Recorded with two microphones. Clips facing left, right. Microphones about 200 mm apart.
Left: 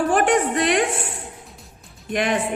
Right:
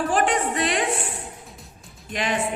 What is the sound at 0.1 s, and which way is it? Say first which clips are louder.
Music: left 4 dB; 60° left (ahead or behind).